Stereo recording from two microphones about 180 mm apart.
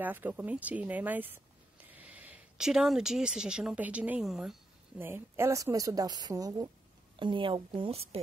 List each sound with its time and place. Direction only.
0.0 s a woman's voice: 10° right (ahead or behind); by 8.2 s 35° right (ahead or behind)